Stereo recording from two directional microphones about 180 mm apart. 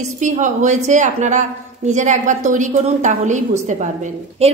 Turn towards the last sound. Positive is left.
turn(degrees=-35)  # may be behind; listen again after turning